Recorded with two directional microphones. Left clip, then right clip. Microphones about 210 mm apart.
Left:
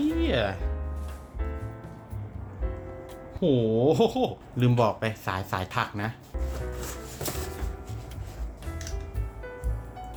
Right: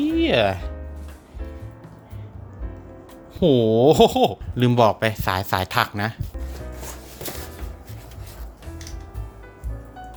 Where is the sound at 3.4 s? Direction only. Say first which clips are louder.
Right 7 dB; 45° right (ahead or behind).